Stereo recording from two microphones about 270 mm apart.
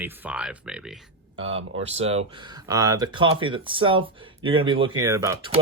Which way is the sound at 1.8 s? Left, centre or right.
Right.